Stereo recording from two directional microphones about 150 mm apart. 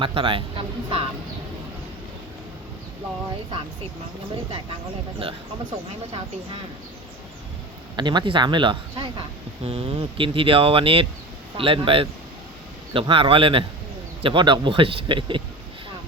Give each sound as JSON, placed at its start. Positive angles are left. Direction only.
{"t": 0.0, "sound": "speech", "side_deg": -35}
{"t": 7.9, "sound": "speech", "side_deg": -30}